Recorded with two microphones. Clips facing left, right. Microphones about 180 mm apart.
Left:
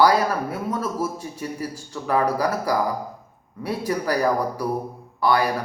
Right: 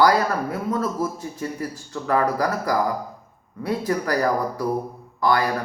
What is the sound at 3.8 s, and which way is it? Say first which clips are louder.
Speech: left 1 dB; 10° left (ahead or behind).